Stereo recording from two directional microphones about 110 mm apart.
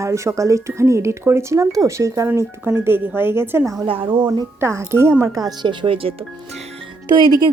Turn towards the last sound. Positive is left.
turn(degrees=-40)  # may be behind; listen again after turning